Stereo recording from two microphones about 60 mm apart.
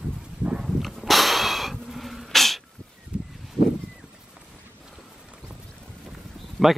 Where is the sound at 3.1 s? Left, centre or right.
Centre.